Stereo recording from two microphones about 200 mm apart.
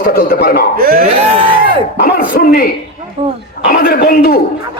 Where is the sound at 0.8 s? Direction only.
45° right (ahead or behind).